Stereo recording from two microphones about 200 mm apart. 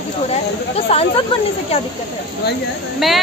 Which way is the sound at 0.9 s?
30° left (ahead or behind).